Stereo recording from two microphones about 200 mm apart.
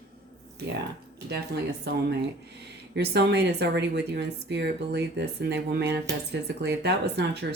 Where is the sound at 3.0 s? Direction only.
55° right (ahead or behind).